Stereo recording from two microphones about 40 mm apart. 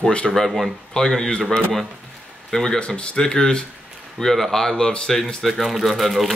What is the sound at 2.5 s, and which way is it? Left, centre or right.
Speech, centre.